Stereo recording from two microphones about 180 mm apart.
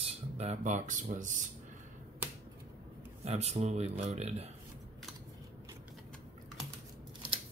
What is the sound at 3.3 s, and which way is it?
Speech, 35° right (ahead or behind).